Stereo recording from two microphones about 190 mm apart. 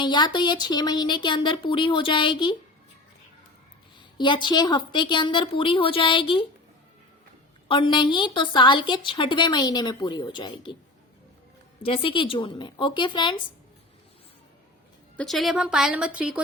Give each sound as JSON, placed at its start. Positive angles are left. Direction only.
{"t": 0.0, "sound": "a woman's voice", "side_deg": 25}
{"t": 4.2, "sound": "a woman's voice", "side_deg": 25}
{"t": 7.7, "sound": "a woman's voice", "side_deg": 25}
{"t": 11.8, "sound": "a woman's voice", "side_deg": 30}
{"t": 15.1, "sound": "a woman's voice", "side_deg": 0}